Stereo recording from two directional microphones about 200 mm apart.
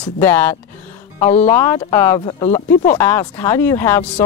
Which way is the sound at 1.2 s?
30° left (ahead or behind).